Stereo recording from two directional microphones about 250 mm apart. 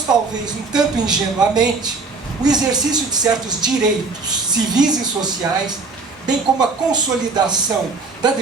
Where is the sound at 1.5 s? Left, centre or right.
Centre.